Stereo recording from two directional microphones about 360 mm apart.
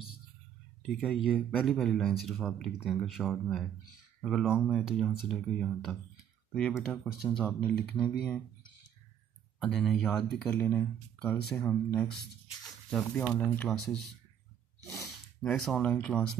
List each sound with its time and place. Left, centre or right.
1.0 s speech: centre
9.8 s speech: centre
15.4 s speech: centre